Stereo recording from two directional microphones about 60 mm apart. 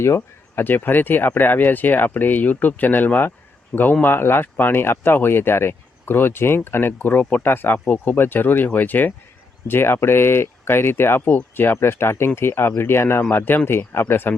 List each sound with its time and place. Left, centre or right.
0.2 s speech: left